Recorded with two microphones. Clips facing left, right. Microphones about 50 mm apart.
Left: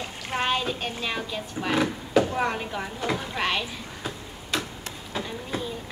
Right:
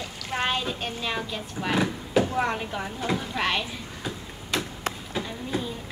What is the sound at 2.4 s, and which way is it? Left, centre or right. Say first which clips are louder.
Speech: even; centre.